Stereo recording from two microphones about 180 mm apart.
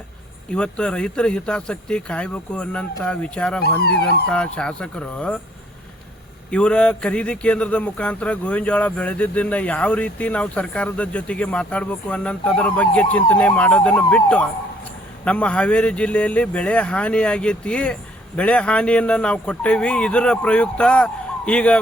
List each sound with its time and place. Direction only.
0.5 s speech: 5° left (ahead or behind)
3.8 s speech: 60° left (ahead or behind)
4.3 s speech: 5° left (ahead or behind)
6.5 s a man's voice: 5° left (ahead or behind)